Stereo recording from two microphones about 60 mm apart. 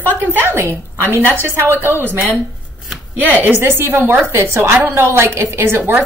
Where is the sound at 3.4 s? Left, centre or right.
Right.